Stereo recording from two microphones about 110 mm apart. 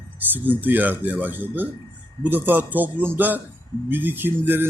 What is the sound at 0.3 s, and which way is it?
A man's voice, 15° right (ahead or behind).